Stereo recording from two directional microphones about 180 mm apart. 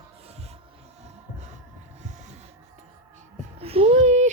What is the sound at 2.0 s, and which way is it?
Music, 40° right (ahead or behind).